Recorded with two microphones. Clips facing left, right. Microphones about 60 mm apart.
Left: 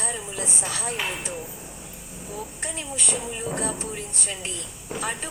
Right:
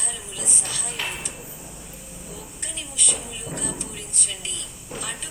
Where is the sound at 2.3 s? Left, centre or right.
Left.